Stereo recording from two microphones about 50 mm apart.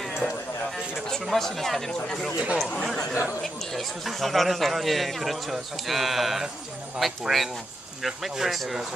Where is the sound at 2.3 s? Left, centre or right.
Right.